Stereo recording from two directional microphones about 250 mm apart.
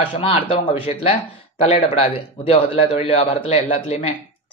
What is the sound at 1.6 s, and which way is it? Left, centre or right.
Speech, left.